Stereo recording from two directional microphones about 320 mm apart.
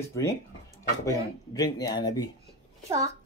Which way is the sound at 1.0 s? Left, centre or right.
Centre.